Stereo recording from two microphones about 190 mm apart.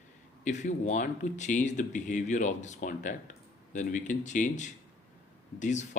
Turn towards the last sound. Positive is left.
turn(degrees=40)  # may be behind; listen again after turning